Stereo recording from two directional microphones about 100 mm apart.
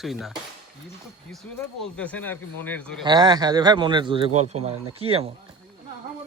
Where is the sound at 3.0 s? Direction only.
45° right (ahead or behind); by 5.3 s 75° right (ahead or behind).